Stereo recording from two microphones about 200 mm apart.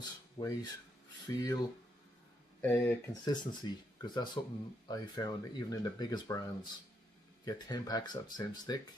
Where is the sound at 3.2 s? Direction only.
20° left (ahead or behind).